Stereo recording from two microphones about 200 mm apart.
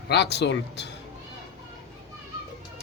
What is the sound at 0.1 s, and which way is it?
Speech, 55° left (ahead or behind).